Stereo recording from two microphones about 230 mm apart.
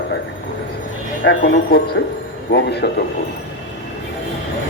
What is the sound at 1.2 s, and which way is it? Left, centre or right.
A man's voice, left.